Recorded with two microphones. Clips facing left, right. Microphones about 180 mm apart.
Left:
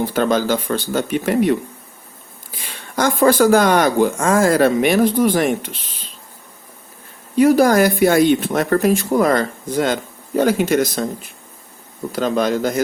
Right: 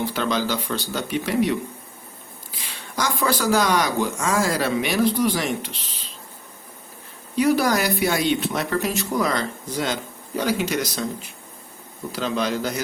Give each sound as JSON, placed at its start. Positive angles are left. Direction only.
{"t": 0.0, "sound": "speech", "side_deg": 45}
{"t": 2.6, "sound": "speech", "side_deg": 50}
{"t": 7.3, "sound": "speech", "side_deg": 50}